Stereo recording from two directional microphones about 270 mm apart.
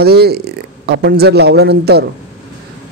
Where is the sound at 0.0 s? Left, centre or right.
Right.